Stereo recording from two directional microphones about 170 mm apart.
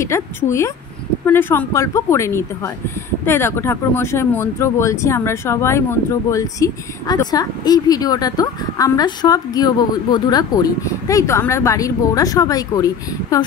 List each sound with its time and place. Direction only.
0.0 s speech: 15° left (ahead or behind)